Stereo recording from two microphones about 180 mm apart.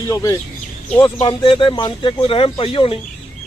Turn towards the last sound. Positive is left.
turn(degrees=30)  # may be behind; listen again after turning